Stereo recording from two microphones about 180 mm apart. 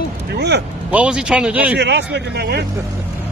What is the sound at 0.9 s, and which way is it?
Speech, 5° right (ahead or behind).